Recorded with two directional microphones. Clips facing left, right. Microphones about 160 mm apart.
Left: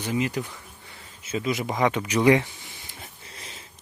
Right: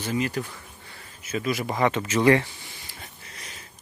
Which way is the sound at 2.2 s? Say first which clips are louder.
Even; 15° left (ahead or behind).